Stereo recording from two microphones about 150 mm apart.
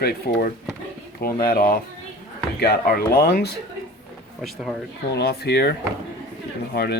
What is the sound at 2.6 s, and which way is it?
Speech, 90° left.